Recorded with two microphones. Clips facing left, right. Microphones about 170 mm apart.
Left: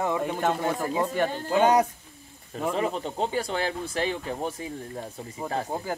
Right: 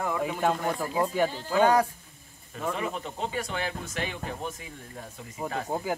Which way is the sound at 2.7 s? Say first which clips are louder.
Left 5 dB; 30° left (ahead or behind).